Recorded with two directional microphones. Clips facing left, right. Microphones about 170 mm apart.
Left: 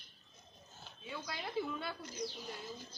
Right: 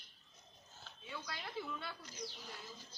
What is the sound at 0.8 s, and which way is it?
Speech, 15° left (ahead or behind).